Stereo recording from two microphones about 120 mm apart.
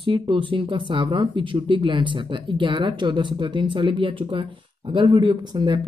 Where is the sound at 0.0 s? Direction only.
45° right (ahead or behind).